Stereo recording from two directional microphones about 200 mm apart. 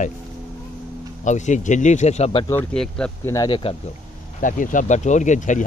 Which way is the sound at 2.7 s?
5° left (ahead or behind).